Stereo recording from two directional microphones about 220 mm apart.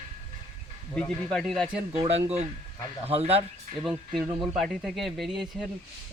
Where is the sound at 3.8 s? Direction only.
Centre (ahead or behind).